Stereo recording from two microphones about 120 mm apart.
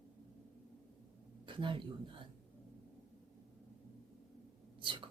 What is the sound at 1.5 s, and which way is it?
Speech, 45° right (ahead or behind).